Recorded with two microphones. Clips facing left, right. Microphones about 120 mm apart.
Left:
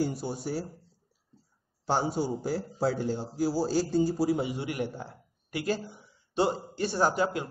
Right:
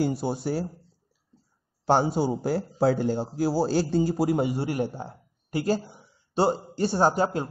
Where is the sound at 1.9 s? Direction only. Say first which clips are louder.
Right 6 dB; 65° right (ahead or behind).